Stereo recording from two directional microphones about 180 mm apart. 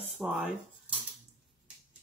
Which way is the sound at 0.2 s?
5° right (ahead or behind).